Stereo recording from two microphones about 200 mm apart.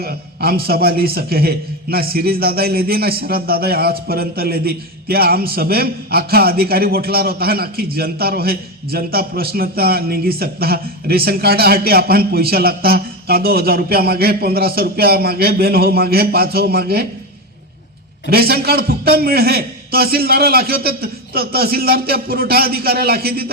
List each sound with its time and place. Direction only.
0.0 s a man's voice: 50° right (ahead or behind)
18.3 s a man's voice: 50° right (ahead or behind)